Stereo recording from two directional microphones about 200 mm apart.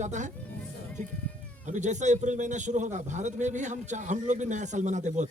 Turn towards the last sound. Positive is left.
turn(degrees=-35)  # may be behind; listen again after turning